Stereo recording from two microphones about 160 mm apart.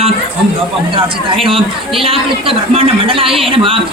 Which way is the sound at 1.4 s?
35° right (ahead or behind).